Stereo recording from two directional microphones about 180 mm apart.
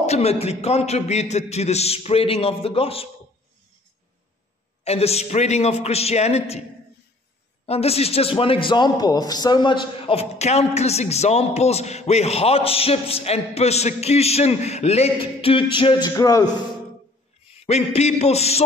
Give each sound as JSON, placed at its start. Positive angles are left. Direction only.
{"t": 0.0, "sound": "a man's voice", "side_deg": 35}
{"t": 4.8, "sound": "a man's voice", "side_deg": 35}
{"t": 7.6, "sound": "a man's voice", "side_deg": 35}
{"t": 17.6, "sound": "a man's voice", "side_deg": 35}